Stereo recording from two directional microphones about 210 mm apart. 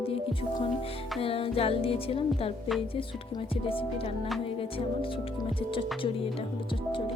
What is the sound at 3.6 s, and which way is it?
Speech, 25° left (ahead or behind).